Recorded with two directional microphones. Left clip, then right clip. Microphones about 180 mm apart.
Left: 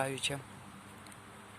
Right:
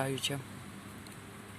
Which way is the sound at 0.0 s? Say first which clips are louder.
Even; 10° left (ahead or behind).